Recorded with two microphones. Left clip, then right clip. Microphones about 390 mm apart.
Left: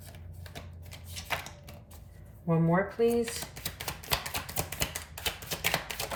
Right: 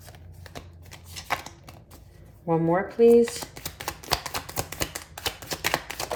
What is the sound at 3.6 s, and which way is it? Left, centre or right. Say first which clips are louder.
Typewriter: right 4 dB; centre.